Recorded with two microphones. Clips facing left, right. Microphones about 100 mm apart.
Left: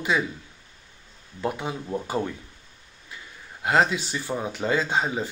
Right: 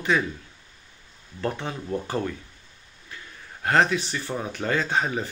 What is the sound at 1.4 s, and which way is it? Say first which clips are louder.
Speech: left 1 dB; 10° left (ahead or behind).